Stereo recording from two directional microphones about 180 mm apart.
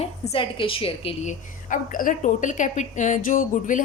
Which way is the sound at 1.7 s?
45° left (ahead or behind).